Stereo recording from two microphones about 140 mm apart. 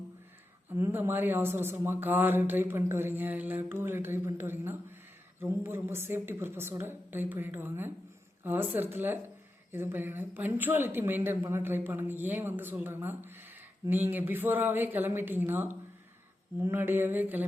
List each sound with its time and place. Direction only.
0.7 s a woman's voice: 15° right (ahead or behind)